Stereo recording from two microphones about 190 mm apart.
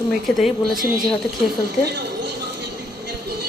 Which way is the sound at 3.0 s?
60° right (ahead or behind).